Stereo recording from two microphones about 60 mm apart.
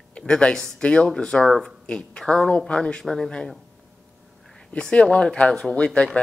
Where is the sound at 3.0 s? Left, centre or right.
Centre.